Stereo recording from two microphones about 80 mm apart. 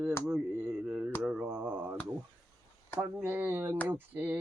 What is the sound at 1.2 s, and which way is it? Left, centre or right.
Mantra, centre.